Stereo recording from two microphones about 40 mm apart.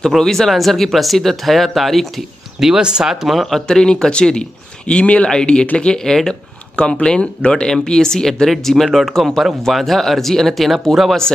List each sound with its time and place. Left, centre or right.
0.2 s speech: centre
2.6 s speech: centre
3.3 s speech: centre
3.6 s speech: centre
6.8 s speech: left
7.6 s speech: centre